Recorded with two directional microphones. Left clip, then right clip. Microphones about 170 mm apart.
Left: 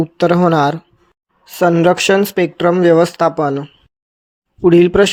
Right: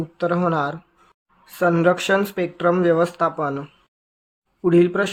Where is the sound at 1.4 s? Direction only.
30° left (ahead or behind).